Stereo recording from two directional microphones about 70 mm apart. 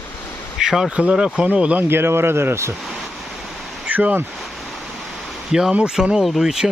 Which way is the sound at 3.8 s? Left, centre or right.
Right.